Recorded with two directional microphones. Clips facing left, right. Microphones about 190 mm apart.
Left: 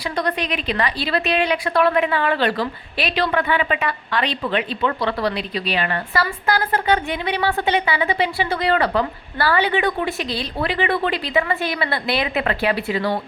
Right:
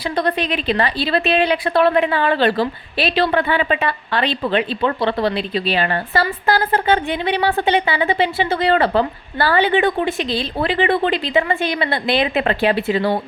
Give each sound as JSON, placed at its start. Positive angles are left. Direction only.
{"t": 0.2, "sound": "a woman's voice", "side_deg": -30}